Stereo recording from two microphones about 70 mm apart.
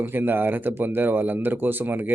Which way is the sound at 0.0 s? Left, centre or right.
Right.